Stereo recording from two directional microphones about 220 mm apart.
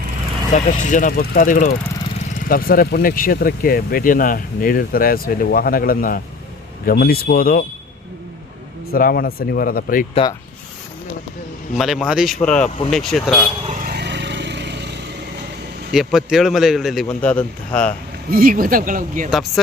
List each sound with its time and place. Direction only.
0.5 s speech: 35° left (ahead or behind)
8.9 s speech: 45° left (ahead or behind)
11.8 s a man's voice: centre (ahead or behind)
13.7 s vehicle: 40° right (ahead or behind)
15.9 s a man's voice: centre (ahead or behind)
18.3 s speech: 40° right (ahead or behind)
19.3 s a man's voice: centre (ahead or behind)